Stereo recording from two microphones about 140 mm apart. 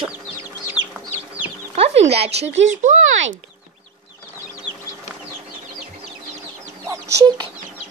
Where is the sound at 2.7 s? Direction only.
60° right (ahead or behind).